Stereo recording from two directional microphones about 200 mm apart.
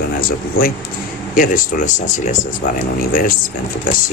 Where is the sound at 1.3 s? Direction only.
45° left (ahead or behind).